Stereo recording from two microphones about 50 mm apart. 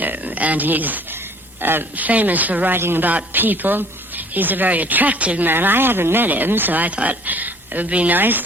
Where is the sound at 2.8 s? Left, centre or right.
Right.